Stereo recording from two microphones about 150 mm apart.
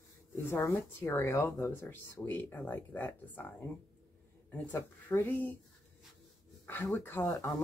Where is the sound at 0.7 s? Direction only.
20° left (ahead or behind).